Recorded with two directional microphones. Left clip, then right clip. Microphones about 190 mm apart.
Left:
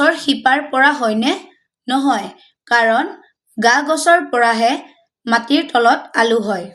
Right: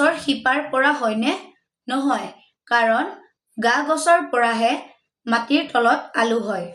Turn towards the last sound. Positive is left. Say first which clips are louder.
# left 5 dB
turn(degrees=30)  # may be behind; listen again after turning